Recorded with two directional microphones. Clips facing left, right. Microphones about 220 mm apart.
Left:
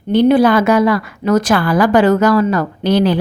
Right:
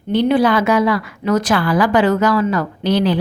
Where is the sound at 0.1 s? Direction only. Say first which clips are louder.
Left 4 dB; 45° left (ahead or behind).